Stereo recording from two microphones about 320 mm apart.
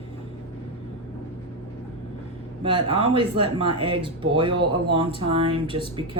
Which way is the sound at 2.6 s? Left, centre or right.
Centre.